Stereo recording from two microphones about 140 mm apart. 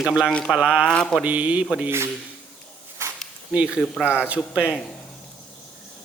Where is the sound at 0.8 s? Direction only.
5° left (ahead or behind).